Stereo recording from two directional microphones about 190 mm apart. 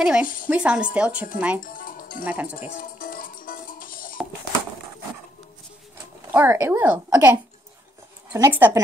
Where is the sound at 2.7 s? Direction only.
45° left (ahead or behind).